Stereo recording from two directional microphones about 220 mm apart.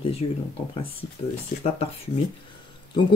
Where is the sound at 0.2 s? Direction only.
25° left (ahead or behind).